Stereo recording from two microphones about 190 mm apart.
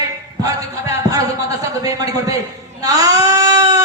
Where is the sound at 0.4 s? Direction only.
20° right (ahead or behind).